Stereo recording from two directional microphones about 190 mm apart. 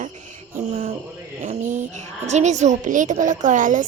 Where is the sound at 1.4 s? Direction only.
40° right (ahead or behind).